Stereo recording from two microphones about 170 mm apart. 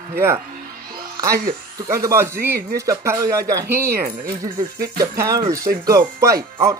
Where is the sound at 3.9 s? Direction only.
60° right (ahead or behind).